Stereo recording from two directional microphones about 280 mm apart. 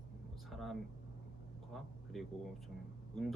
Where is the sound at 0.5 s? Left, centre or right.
Centre.